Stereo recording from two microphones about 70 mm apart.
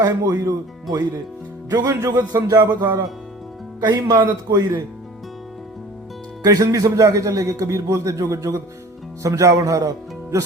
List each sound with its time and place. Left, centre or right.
0.0 s speech: right
1.7 s speech: right
2.0 s a man's voice: right
2.3 s a man's voice: right
6.4 s a man's voice: right